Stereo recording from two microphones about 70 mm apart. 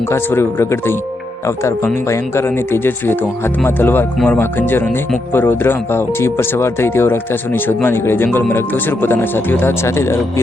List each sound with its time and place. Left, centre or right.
0.1 s speech: left
2.0 s speech: left